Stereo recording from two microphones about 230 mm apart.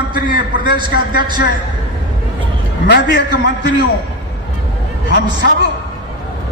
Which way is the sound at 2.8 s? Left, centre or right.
Left.